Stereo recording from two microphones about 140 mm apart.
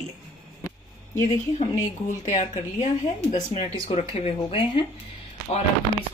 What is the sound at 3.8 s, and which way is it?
Speech, 45° left (ahead or behind).